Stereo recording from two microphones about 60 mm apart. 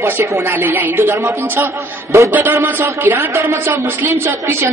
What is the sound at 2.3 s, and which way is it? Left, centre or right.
A man's voice, right.